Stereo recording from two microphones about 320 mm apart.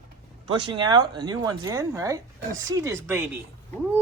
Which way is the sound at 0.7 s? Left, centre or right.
Centre.